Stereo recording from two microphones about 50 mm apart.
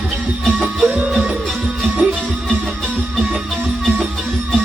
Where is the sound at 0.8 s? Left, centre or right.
Centre.